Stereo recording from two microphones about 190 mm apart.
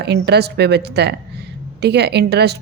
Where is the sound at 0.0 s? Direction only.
60° right (ahead or behind).